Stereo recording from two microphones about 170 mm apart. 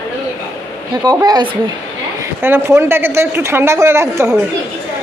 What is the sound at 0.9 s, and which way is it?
A man's voice, 20° right (ahead or behind).